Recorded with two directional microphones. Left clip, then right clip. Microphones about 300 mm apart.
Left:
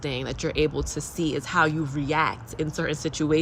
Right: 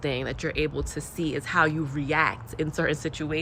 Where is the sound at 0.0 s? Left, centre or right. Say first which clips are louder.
Even; centre.